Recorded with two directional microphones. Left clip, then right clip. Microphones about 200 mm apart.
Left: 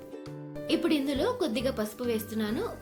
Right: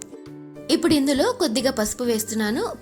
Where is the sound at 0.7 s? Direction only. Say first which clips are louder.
Right 8 dB; 50° right (ahead or behind).